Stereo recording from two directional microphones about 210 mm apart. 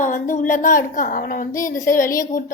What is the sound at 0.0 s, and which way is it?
A woman's voice, 40° left (ahead or behind).